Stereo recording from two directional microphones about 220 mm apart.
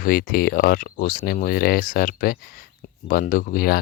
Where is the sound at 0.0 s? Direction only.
40° left (ahead or behind).